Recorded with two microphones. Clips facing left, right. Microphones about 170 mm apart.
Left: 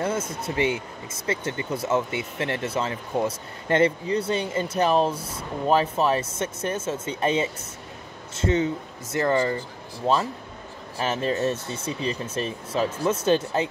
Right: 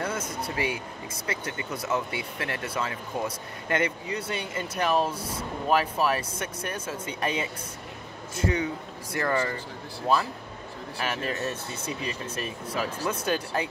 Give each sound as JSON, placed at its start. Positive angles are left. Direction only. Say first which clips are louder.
{"t": 0.0, "sound": "speech", "louder": "left 4 dB", "side_deg": 25}